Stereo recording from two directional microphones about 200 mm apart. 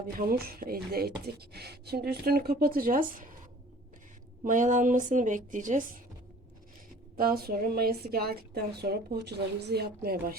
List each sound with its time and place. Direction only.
0.2 s a woman's voice: 50° right (ahead or behind)
4.4 s a woman's voice: 40° right (ahead or behind)
7.2 s a woman's voice: 50° right (ahead or behind)